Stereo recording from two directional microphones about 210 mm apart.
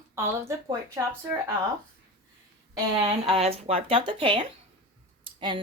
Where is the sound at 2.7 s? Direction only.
25° right (ahead or behind).